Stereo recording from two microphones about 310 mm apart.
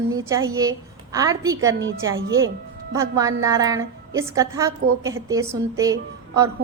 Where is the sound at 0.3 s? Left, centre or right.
Centre.